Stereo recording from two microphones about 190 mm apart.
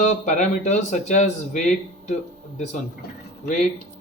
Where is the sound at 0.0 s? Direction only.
40° left (ahead or behind).